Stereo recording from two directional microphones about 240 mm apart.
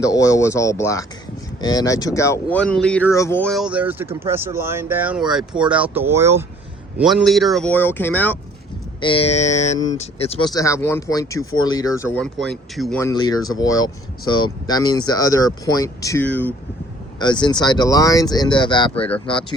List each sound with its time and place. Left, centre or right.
0.0 s speech: centre
9.0 s mantra: left
9.9 s speech: left
12.2 s speech: centre
13.0 s speech: centre
17.2 s speech: centre
19.2 s mantra: centre